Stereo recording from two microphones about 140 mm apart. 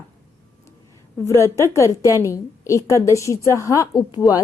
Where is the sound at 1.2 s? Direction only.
20° left (ahead or behind).